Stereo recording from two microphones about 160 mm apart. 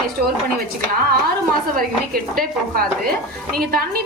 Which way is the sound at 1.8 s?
65° right (ahead or behind).